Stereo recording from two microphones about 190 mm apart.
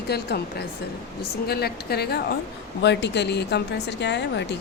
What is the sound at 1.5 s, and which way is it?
A woman's voice, 55° left (ahead or behind).